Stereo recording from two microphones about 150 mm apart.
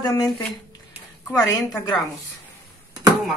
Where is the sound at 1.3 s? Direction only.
20° left (ahead or behind).